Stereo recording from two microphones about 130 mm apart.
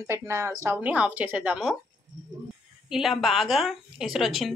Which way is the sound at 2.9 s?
Centre (ahead or behind).